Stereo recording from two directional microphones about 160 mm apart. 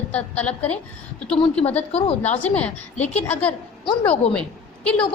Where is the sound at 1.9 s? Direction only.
40° left (ahead or behind).